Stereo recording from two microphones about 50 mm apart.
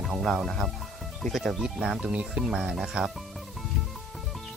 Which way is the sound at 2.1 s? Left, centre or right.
Right.